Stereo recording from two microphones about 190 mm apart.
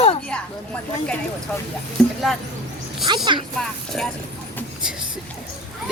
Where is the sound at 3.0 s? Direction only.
25° right (ahead or behind).